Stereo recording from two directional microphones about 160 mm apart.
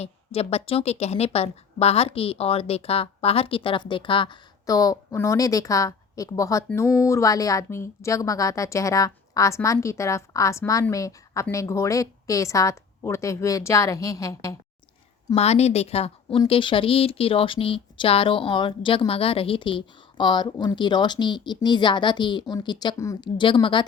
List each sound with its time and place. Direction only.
0.0 s a woman's voice: 40° left (ahead or behind); by 14.5 s 20° left (ahead or behind)
15.4 s a woman's voice: 40° left (ahead or behind)